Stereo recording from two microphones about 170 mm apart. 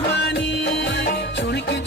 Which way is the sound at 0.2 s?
90° left.